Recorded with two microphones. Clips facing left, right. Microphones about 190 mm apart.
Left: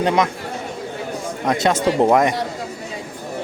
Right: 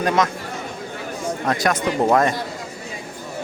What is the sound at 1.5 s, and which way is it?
Speech, 25° left (ahead or behind).